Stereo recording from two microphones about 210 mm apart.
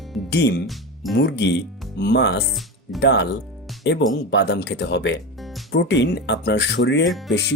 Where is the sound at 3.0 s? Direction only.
55° left (ahead or behind).